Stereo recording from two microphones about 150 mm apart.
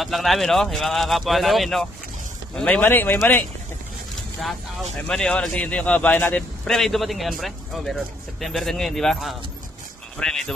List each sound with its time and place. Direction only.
0.0 s speech: centre (ahead or behind)
5.0 s speech: 5° left (ahead or behind)